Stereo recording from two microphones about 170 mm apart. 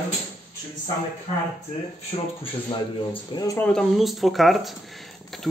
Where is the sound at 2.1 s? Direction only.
35° left (ahead or behind).